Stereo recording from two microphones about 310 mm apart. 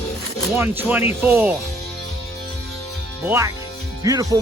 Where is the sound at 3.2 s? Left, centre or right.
Centre.